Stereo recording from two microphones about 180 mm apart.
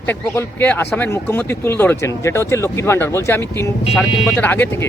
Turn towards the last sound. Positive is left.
turn(degrees=10)  # may be behind; listen again after turning